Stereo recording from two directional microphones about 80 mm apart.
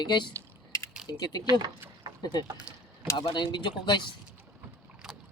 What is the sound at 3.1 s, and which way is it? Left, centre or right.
Speech, left.